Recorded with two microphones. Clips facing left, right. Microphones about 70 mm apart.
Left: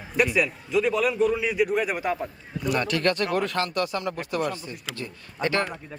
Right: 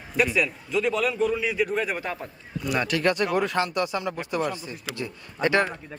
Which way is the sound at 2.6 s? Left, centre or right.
Centre.